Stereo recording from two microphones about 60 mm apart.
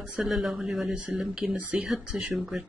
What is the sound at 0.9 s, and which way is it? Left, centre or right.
Speech, centre.